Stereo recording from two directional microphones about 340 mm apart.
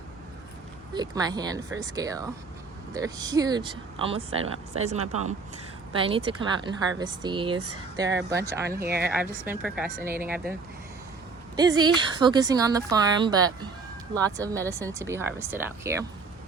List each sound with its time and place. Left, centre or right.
0.9 s speech: centre
4.9 s speech: right
5.9 s speech: centre
8.8 s speech: right
9.5 s speech: centre
11.5 s speech: centre